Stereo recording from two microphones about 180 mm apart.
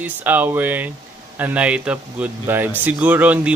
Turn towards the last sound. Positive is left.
turn(degrees=-10)  # may be behind; listen again after turning